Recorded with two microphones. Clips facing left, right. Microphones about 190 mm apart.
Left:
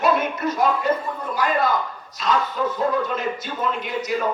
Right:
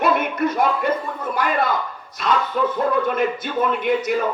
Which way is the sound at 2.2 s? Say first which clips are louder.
Right 2 dB; 55° right (ahead or behind).